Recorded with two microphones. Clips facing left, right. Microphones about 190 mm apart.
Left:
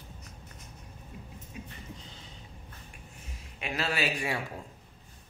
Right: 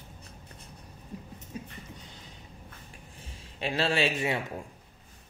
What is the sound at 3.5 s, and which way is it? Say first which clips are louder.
Speech: right 5 dB; 30° right (ahead or behind).